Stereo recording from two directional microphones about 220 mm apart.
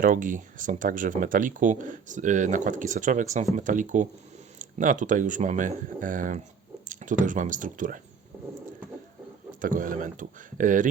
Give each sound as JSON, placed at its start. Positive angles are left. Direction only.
{"t": 0.0, "sound": "speech", "side_deg": -35}
{"t": 9.5, "sound": "speech", "side_deg": -40}